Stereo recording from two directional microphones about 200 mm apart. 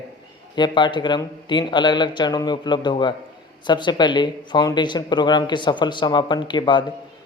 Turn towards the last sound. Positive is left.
turn(degrees=25)  # may be behind; listen again after turning